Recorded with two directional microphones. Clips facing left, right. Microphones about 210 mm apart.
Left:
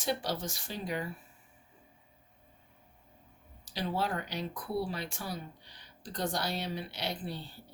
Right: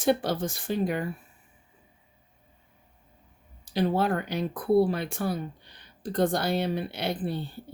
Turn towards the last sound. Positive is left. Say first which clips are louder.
# right 8 dB
turn(degrees=-55)  # may be behind; listen again after turning